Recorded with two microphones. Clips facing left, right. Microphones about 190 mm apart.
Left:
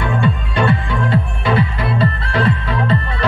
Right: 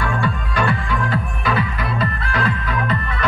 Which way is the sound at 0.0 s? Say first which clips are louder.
Left 4 dB; 25° left (ahead or behind).